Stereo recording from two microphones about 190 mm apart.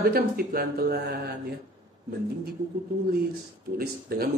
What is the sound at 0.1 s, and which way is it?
Speech, 50° right (ahead or behind).